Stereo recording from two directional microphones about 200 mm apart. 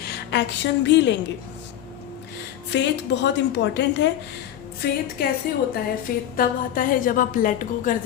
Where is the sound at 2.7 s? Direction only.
60° left (ahead or behind).